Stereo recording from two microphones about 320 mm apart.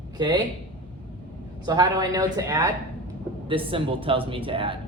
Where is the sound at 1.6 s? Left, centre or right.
Centre.